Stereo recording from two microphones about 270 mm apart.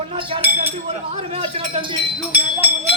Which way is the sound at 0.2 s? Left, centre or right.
Centre.